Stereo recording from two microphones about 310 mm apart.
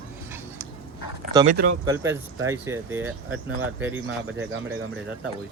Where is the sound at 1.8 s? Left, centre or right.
Centre.